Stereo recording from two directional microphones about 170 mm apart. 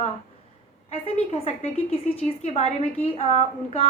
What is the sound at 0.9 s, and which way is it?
A woman's voice, 35° left (ahead or behind).